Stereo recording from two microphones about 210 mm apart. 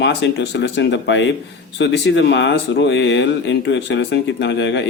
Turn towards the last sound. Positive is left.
turn(degrees=60)  # may be behind; listen again after turning